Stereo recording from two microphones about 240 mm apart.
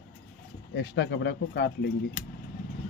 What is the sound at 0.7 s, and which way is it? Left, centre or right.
Speech, left.